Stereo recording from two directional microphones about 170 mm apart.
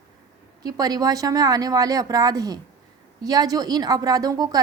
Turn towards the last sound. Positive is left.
turn(degrees=-20)  # may be behind; listen again after turning